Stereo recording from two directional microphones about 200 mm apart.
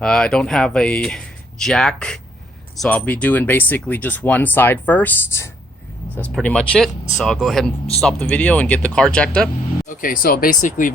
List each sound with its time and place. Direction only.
0.0 s speech: 5° left (ahead or behind)
10.0 s speech: 45° left (ahead or behind)